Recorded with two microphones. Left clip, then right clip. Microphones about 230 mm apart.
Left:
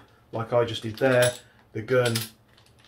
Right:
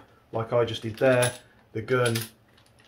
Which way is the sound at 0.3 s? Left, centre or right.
Centre.